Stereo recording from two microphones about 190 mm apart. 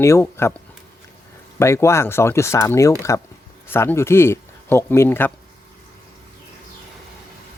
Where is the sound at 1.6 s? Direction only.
15° left (ahead or behind).